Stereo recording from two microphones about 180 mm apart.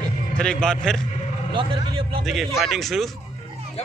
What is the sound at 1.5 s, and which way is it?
Speech, 25° right (ahead or behind).